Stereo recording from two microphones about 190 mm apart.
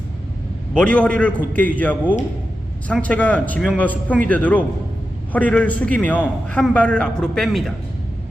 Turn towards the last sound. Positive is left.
turn(degrees=0)  # may be behind; listen again after turning